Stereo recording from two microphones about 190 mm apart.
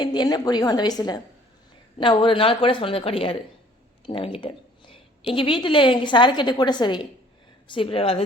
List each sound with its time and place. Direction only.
0.0 s a woman's voice: 25° left (ahead or behind)